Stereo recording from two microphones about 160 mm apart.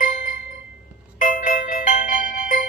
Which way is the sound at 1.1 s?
55° left (ahead or behind).